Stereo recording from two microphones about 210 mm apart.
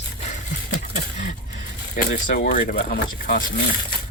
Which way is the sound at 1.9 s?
45° left (ahead or behind).